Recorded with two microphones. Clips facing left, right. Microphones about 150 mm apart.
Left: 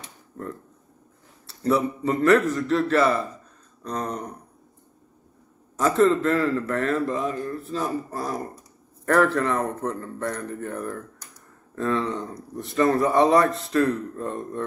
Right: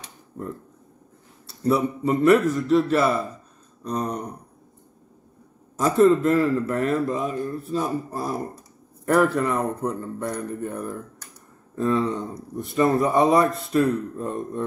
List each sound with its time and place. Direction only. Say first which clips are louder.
1.6 s speech: right 1 dB; 15° right (ahead or behind)
5.9 s speech: right 3 dB; 15° right (ahead or behind)
9.0 s speech: right 1 dB; 10° right (ahead or behind)